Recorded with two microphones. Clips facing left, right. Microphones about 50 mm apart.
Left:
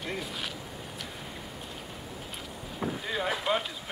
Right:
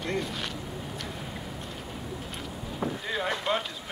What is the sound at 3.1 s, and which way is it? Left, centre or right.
Boat, centre.